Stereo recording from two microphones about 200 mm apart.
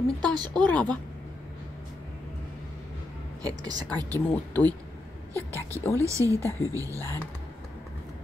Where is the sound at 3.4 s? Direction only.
20° right (ahead or behind).